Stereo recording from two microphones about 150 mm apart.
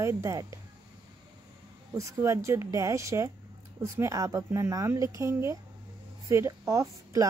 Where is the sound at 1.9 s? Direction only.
20° right (ahead or behind).